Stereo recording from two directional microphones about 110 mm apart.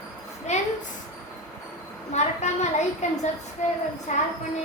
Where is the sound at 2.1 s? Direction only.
90° left.